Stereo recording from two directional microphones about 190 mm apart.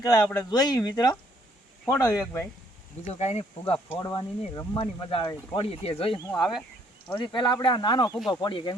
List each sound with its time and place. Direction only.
0.0 s speech: 20° left (ahead or behind)
3.1 s speech: 35° left (ahead or behind)
4.0 s speech: 20° left (ahead or behind)
6.3 s speech: centre (ahead or behind)
7.2 s speech: 25° left (ahead or behind)